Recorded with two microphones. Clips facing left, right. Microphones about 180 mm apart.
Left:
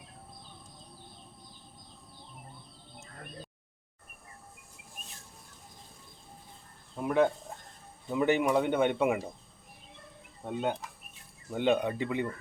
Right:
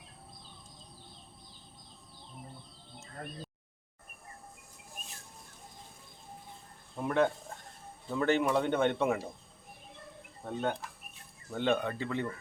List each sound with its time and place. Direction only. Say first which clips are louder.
7.0 s speech: left 2 dB; 10° left (ahead or behind)
10.4 s speech: left 2 dB; 10° left (ahead or behind)